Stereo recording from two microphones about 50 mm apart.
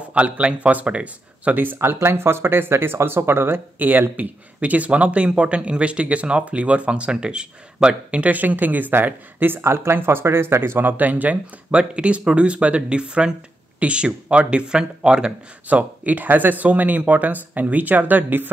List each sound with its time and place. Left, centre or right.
0.1 s speech: right
2.0 s speech: right
3.7 s speech: right
9.6 s speech: right
11.8 s speech: right
15.7 s speech: right